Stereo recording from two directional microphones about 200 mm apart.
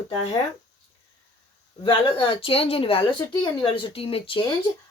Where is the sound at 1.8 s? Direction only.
25° left (ahead or behind).